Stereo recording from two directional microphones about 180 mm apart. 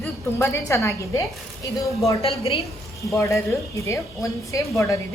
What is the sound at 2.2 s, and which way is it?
Speech, 35° left (ahead or behind).